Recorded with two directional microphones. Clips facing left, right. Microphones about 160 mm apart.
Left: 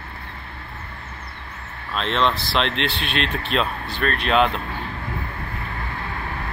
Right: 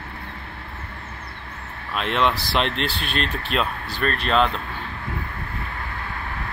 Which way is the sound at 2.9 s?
45° right (ahead or behind).